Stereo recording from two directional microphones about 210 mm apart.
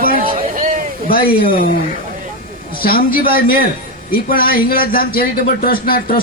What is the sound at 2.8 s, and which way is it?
A man's voice, 45° left (ahead or behind).